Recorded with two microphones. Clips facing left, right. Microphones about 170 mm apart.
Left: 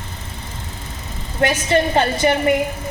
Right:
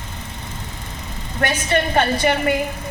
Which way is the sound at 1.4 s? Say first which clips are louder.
Left 3 dB; 25° left (ahead or behind).